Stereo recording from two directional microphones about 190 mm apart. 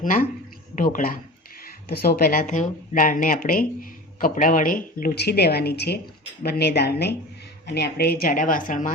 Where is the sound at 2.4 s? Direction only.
40° left (ahead or behind).